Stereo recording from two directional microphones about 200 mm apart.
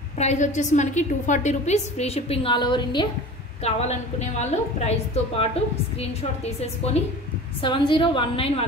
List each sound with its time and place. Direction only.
0.2 s a woman's voice: 35° left (ahead or behind)
3.6 s a woman's voice: 35° left (ahead or behind)